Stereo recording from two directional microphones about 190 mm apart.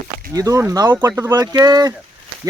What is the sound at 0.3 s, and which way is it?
Speech, 15° right (ahead or behind).